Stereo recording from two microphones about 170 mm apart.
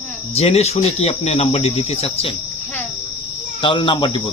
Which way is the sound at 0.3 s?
40° left (ahead or behind).